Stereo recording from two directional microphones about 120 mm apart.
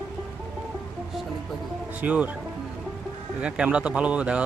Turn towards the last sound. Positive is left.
turn(degrees=-10)  # may be behind; listen again after turning